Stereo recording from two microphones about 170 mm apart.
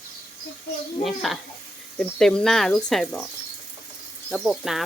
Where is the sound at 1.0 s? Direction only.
Centre (ahead or behind).